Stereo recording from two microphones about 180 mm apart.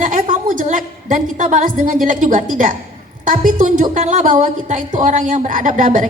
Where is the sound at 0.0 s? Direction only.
45° right (ahead or behind).